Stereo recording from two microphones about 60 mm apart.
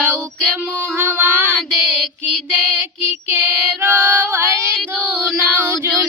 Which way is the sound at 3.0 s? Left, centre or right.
Right.